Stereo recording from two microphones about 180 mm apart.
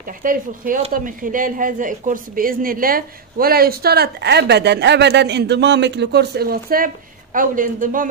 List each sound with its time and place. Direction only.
0.0 s a woman's voice: 50° right (ahead or behind)